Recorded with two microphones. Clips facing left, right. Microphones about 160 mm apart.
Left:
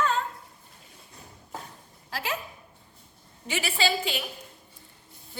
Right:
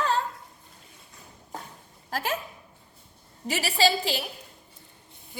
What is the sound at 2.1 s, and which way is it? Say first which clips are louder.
Speech: right 3 dB; 45° right (ahead or behind).